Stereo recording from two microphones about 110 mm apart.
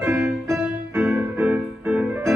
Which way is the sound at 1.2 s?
15° right (ahead or behind).